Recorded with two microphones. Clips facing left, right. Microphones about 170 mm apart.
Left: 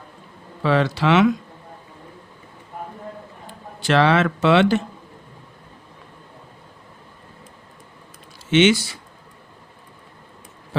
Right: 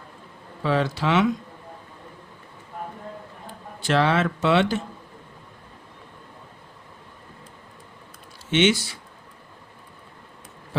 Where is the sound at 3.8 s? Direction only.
80° left.